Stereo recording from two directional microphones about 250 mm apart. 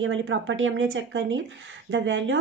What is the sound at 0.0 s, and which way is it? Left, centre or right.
Speech, right.